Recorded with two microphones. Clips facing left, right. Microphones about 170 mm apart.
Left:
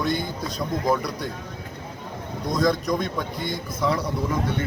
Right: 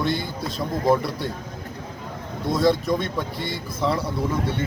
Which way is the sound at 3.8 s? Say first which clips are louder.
Right 1 dB; 30° right (ahead or behind).